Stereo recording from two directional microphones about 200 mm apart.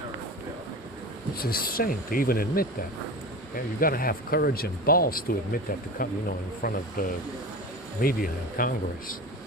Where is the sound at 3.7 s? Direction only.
45° left (ahead or behind).